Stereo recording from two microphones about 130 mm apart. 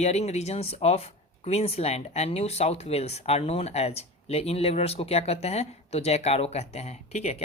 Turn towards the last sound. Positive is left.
turn(degrees=55)  # may be behind; listen again after turning